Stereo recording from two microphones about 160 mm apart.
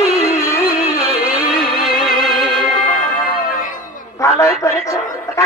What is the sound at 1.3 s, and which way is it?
Music, 5° right (ahead or behind).